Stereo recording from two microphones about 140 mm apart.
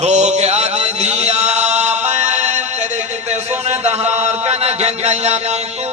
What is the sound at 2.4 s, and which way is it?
Music, 55° right (ahead or behind).